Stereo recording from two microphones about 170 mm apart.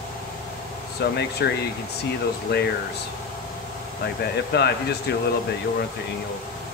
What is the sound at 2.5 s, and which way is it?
Speech, 75° left (ahead or behind).